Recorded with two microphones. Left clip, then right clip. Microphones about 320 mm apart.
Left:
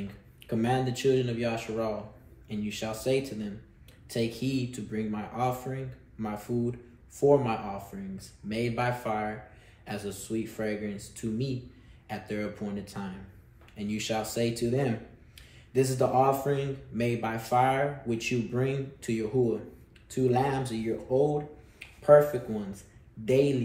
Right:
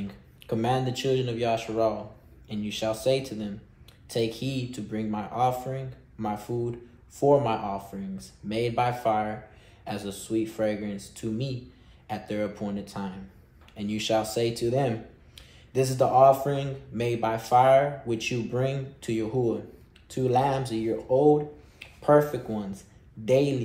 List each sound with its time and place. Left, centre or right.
0.5 s speech: centre
20.2 s speech: centre